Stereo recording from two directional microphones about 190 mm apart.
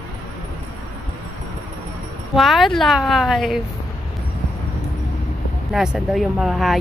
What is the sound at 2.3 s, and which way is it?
A woman's voice, centre (ahead or behind).